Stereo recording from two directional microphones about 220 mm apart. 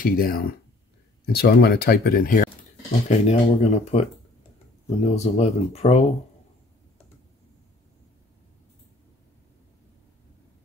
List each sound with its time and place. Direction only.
0.0 s speech: 40° left (ahead or behind)